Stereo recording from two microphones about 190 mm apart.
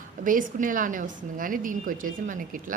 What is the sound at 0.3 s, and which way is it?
A woman's voice, 45° right (ahead or behind).